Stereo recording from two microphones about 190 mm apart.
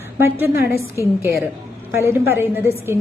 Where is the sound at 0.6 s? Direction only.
55° left (ahead or behind).